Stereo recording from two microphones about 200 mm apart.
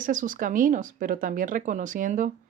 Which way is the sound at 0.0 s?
40° right (ahead or behind).